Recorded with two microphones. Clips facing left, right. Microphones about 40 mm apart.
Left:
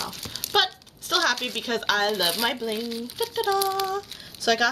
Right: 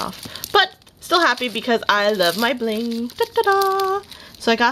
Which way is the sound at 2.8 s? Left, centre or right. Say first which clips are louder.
Right 7 dB; centre.